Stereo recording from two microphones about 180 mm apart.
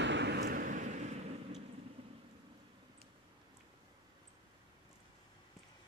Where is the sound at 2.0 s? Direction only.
30° right (ahead or behind).